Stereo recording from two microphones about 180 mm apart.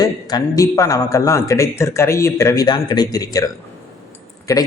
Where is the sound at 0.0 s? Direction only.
20° left (ahead or behind).